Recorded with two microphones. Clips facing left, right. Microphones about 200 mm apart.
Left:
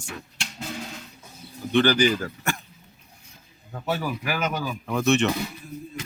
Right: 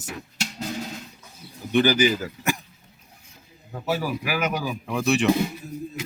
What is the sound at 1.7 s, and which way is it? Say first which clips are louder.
Speech: even; 10° right (ahead or behind).